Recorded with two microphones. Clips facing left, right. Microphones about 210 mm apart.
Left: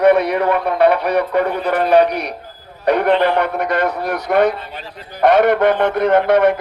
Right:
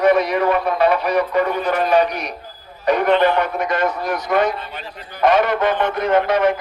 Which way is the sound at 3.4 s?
60° left (ahead or behind).